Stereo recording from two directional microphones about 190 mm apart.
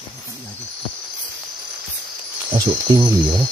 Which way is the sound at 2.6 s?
20° right (ahead or behind).